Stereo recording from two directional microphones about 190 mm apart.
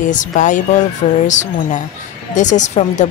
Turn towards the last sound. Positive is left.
turn(degrees=40)  # may be behind; listen again after turning